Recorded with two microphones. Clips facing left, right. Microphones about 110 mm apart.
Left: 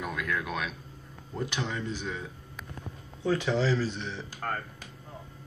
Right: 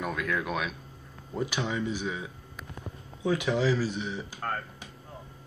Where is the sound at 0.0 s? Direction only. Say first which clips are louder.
Right 2 dB; centre (ahead or behind).